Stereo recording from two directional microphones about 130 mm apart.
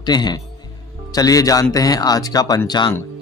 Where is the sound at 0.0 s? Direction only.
30° left (ahead or behind).